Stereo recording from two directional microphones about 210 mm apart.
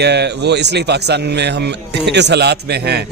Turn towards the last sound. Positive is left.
turn(degrees=-50)  # may be behind; listen again after turning